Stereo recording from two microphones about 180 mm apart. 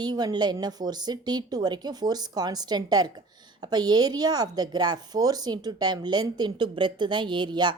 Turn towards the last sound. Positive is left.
turn(degrees=-25)  # may be behind; listen again after turning